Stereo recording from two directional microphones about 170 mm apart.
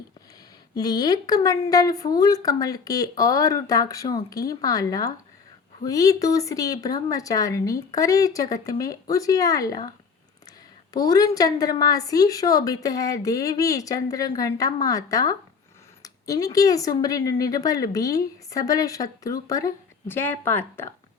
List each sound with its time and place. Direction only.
0.7 s speech: 20° left (ahead or behind)
10.9 s speech: 20° left (ahead or behind)